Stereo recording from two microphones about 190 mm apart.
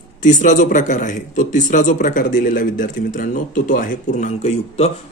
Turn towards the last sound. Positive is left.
turn(degrees=35)  # may be behind; listen again after turning